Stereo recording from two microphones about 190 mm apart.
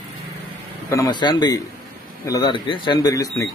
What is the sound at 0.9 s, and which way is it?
Speech, 20° left (ahead or behind).